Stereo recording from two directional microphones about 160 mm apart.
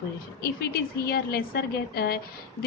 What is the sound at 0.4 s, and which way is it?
A woman's voice, 80° left.